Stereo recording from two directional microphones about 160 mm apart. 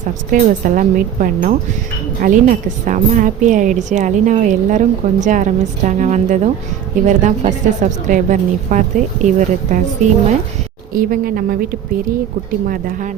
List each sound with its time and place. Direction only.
0.0 s a woman's voice: 55° right (ahead or behind)
10.9 s a woman's voice: 60° right (ahead or behind)
12.6 s a woman's voice: 60° right (ahead or behind)